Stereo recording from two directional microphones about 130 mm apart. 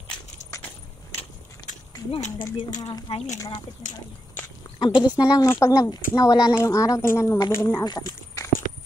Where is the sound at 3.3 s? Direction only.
25° left (ahead or behind).